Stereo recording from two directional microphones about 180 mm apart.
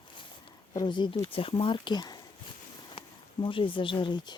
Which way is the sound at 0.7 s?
25° left (ahead or behind).